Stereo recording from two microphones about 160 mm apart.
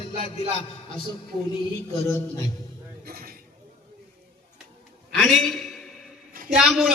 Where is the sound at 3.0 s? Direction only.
70° right (ahead or behind).